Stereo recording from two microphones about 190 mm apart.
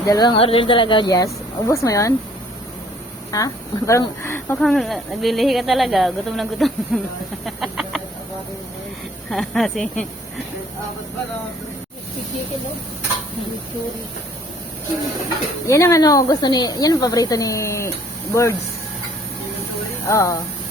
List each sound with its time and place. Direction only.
0.1 s a woman's voice: 20° left (ahead or behind)
3.3 s speech: 15° left (ahead or behind); by 7.0 s centre (ahead or behind)
7.4 s chicken: centre (ahead or behind)
9.3 s speech: centre (ahead or behind)
15.6 s a woman's voice: 15° left (ahead or behind)
20.1 s speech: 15° left (ahead or behind)